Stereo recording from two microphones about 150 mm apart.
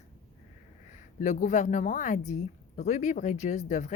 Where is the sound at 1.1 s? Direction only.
55° left (ahead or behind).